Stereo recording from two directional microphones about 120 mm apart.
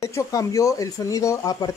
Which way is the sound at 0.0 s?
25° left (ahead or behind).